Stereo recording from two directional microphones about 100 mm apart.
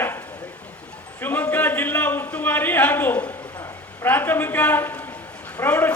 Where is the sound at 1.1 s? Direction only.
20° left (ahead or behind).